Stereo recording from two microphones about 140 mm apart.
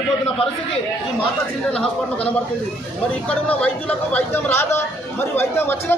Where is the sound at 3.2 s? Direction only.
10° left (ahead or behind).